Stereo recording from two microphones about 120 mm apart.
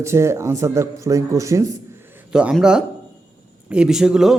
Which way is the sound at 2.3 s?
10° right (ahead or behind).